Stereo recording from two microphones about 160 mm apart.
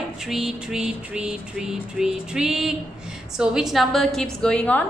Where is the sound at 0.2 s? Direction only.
5° right (ahead or behind).